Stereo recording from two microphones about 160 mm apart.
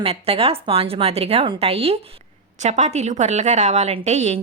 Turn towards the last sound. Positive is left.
turn(degrees=-45)  # may be behind; listen again after turning